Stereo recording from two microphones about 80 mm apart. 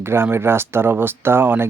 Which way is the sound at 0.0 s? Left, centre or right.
Right.